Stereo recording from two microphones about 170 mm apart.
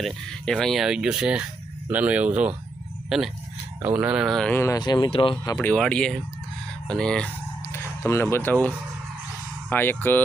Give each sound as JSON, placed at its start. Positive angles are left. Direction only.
{"t": 0.0, "sound": "speech", "side_deg": 5}
{"t": 5.5, "sound": "speech", "side_deg": 5}
{"t": 7.6, "sound": "a sound", "side_deg": 15}
{"t": 9.6, "sound": "speech", "side_deg": 10}